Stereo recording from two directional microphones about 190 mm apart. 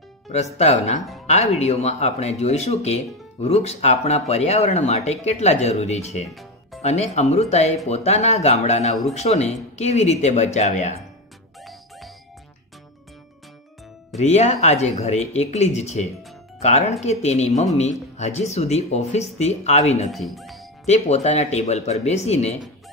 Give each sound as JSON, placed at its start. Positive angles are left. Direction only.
{"t": 0.3, "sound": "speech", "side_deg": 35}
{"t": 14.2, "sound": "speech", "side_deg": 35}
{"t": 20.1, "sound": "speech", "side_deg": 0}
{"t": 20.8, "sound": "speech", "side_deg": 35}